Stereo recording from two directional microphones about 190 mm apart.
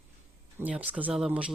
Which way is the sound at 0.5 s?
5° right (ahead or behind).